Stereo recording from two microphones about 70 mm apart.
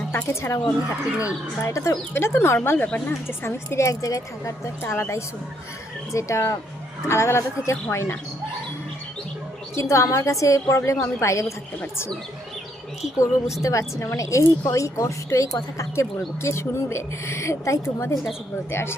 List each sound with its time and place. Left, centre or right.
0.3 s speech: left
2.1 s speech: left
2.6 s speech: left
3.1 s speech: left
4.8 s speech: left
9.9 s speech: left
13.1 s speech: left